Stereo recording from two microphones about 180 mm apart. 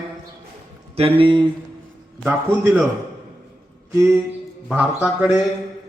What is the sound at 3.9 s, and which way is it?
Speech, 15° right (ahead or behind).